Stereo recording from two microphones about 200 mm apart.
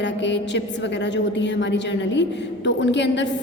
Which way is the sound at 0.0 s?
60° left (ahead or behind).